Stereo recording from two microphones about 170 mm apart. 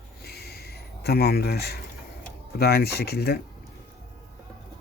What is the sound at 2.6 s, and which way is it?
Speech, 65° left (ahead or behind).